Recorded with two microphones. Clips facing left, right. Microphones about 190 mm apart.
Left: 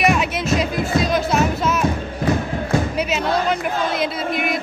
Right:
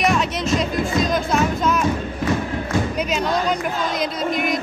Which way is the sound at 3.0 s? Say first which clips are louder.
Left 1 dB; 5° left (ahead or behind).